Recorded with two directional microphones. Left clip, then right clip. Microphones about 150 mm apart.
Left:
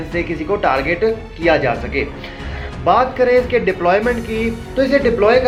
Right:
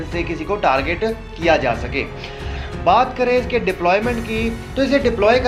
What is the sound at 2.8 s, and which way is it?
Speech, 25° right (ahead or behind).